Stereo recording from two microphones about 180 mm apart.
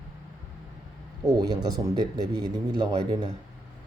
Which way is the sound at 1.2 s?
20° right (ahead or behind).